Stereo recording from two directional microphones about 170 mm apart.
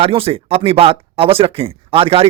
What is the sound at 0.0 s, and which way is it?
Speech, 35° right (ahead or behind).